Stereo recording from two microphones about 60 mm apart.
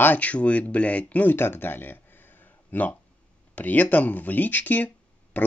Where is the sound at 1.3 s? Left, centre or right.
Left.